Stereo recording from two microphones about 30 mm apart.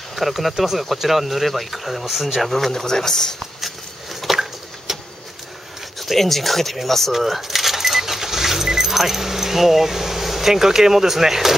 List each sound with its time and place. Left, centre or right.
0.1 s speech: centre
2.7 s speech: centre
3.3 s a sound: centre
5.9 s speech: centre
7.1 s vehicle: centre
10.5 s speech: centre